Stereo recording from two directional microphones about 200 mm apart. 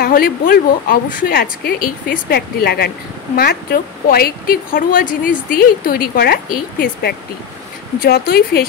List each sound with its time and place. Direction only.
0.0 s speech: 45° left (ahead or behind)